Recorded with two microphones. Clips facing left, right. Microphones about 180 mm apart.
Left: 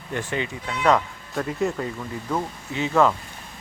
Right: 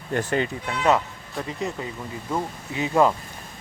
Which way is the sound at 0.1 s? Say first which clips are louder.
Right 4 dB; 40° right (ahead or behind).